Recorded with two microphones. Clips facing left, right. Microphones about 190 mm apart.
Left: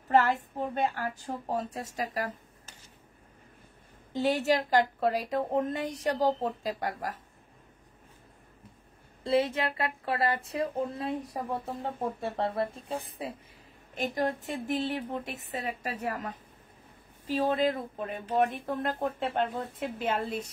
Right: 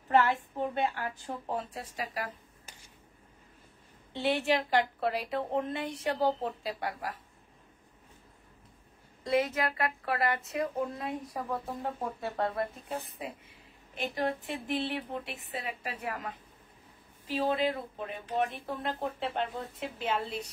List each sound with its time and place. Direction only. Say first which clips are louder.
0.1 s a woman's voice: left 1 dB; 40° left (ahead or behind)
4.1 s a woman's voice: left 2 dB; 40° left (ahead or behind)
9.2 s a woman's voice: left 2 dB; 30° left (ahead or behind)
13.9 s a woman's voice: left 2 dB; 45° left (ahead or behind)